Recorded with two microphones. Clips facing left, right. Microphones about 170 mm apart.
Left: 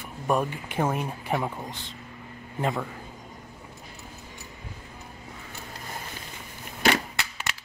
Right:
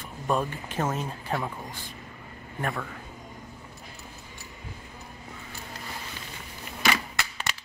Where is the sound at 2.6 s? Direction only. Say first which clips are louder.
Left 4 dB; 20° left (ahead or behind).